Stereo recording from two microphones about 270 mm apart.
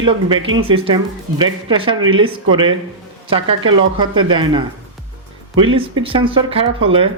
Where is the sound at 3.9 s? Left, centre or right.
Centre.